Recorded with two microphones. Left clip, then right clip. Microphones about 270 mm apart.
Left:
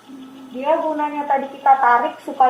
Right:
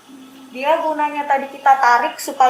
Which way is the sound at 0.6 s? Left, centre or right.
Centre.